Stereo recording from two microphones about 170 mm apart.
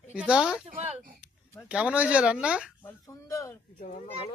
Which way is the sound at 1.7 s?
5° right (ahead or behind).